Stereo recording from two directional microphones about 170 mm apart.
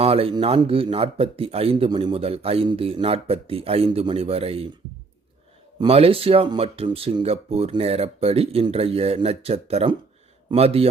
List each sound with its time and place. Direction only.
0.0 s speech: 35° right (ahead or behind)
5.8 s speech: 35° right (ahead or behind)